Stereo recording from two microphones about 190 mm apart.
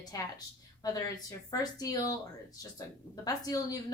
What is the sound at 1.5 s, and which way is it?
Speech, 20° left (ahead or behind).